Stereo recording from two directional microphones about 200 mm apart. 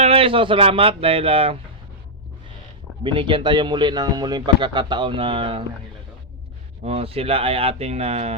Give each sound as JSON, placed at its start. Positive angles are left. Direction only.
{"t": 0.0, "sound": "a man's voice", "side_deg": -30}
{"t": 3.0, "sound": "a man's voice", "side_deg": -25}
{"t": 6.8, "sound": "a man's voice", "side_deg": -30}